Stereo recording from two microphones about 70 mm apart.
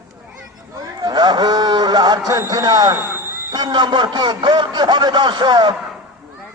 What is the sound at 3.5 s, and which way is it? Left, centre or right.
Speech, right.